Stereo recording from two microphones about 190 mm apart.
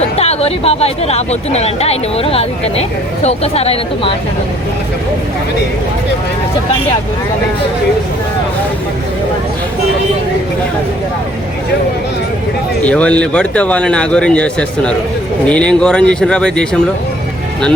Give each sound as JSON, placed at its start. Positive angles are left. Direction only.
{"t": 0.2, "sound": "speech", "side_deg": 30}
{"t": 12.8, "sound": "speech", "side_deg": 5}